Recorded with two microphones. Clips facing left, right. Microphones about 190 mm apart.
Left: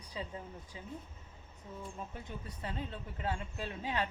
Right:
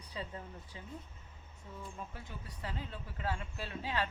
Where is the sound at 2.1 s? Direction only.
25° left (ahead or behind).